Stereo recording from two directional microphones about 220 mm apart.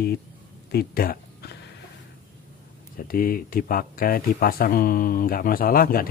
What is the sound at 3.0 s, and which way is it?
Speech, 40° left (ahead or behind).